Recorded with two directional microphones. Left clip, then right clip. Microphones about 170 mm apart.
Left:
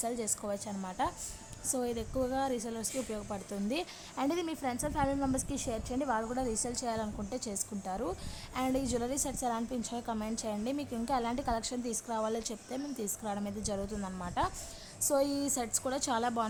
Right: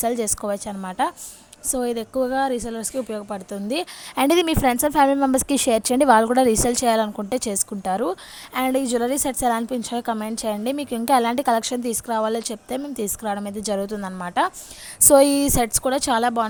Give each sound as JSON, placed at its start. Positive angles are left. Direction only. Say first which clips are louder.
{"t": 0.0, "sound": "a woman's voice", "louder": "right 13 dB", "side_deg": -30}
{"t": 4.1, "sound": "a woman's voice", "louder": "right 16 dB", "side_deg": -40}
{"t": 6.3, "sound": "a woman's voice", "louder": "right 17 dB", "side_deg": -45}
{"t": 15.0, "sound": "a woman's voice", "louder": "right 16 dB", "side_deg": -45}